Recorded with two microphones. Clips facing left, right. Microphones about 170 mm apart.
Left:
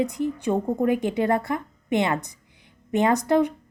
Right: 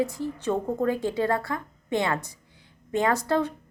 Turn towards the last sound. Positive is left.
turn(degrees=15)  # may be behind; listen again after turning